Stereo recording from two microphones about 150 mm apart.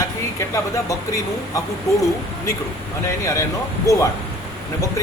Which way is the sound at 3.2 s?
20° left (ahead or behind).